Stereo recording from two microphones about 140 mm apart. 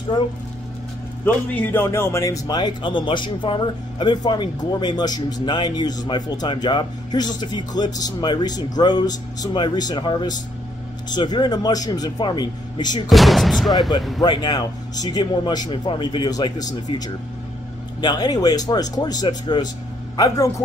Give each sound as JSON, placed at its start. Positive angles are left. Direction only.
{"t": 1.2, "sound": "a man's voice", "side_deg": 15}
{"t": 13.1, "sound": "speech", "side_deg": 0}
{"t": 14.2, "sound": "a man's voice", "side_deg": 30}
{"t": 18.0, "sound": "speech", "side_deg": 30}